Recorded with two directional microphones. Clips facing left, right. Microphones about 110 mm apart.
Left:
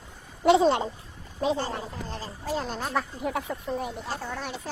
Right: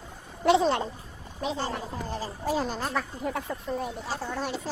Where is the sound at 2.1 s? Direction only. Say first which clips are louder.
Right 4 dB; 15° right (ahead or behind).